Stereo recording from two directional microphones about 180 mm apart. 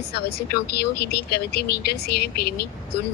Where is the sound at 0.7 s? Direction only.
65° left (ahead or behind).